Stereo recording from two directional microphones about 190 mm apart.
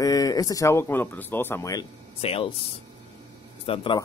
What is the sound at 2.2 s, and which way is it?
Speech, 30° left (ahead or behind).